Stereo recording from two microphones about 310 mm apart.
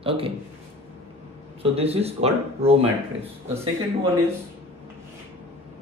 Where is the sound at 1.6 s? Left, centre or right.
Centre.